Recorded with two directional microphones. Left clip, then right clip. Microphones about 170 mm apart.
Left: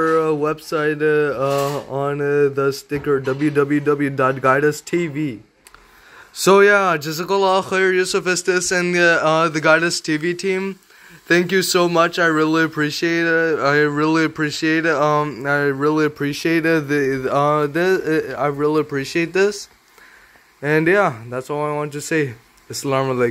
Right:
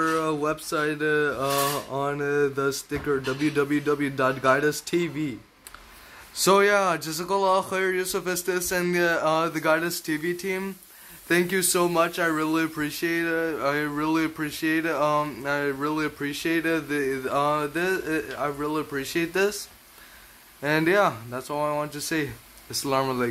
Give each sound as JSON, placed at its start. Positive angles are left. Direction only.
{"t": 0.0, "sound": "speech", "side_deg": 10}
{"t": 6.3, "sound": "speech", "side_deg": 15}
{"t": 20.6, "sound": "speech", "side_deg": 20}